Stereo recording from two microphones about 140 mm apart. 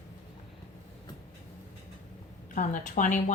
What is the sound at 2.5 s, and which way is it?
Speech, 65° left (ahead or behind).